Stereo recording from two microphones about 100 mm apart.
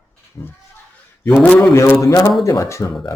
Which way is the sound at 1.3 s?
10° left (ahead or behind).